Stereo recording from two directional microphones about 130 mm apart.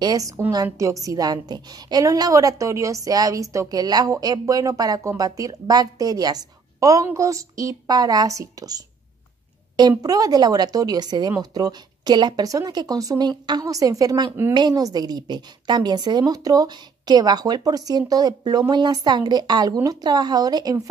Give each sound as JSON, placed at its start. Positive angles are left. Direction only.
{"t": 0.0, "sound": "a woman's voice", "side_deg": -30}